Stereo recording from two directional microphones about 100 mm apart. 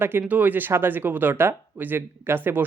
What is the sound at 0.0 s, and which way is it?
Speech, 20° right (ahead or behind).